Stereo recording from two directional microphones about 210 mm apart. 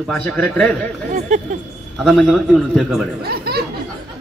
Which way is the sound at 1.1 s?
35° right (ahead or behind).